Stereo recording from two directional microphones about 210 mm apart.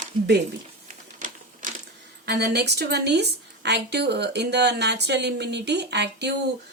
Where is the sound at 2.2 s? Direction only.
50° right (ahead or behind).